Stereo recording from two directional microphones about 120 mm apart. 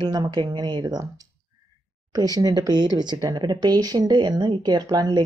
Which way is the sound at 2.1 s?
30° right (ahead or behind).